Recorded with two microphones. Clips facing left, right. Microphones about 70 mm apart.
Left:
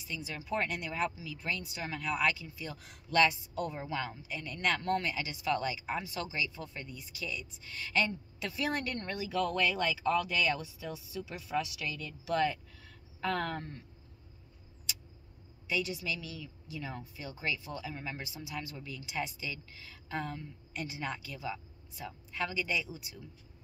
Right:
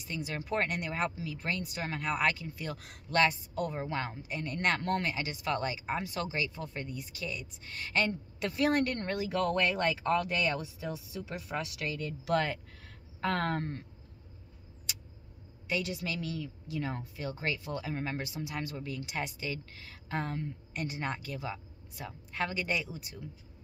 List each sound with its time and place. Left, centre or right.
0.0 s speech: right
15.7 s speech: right